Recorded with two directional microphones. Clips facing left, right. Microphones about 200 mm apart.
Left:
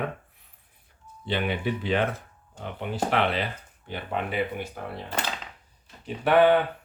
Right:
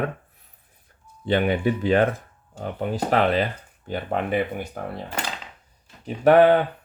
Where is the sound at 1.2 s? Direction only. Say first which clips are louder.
Right 7 dB; 45° right (ahead or behind).